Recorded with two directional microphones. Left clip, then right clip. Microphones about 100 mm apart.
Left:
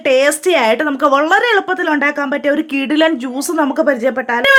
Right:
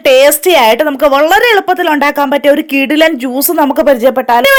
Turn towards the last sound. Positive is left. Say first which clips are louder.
# right 5 dB
turn(degrees=-35)  # may be behind; listen again after turning